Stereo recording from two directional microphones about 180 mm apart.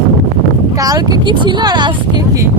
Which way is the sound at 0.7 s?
20° right (ahead or behind).